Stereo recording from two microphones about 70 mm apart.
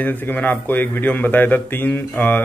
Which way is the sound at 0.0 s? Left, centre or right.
Left.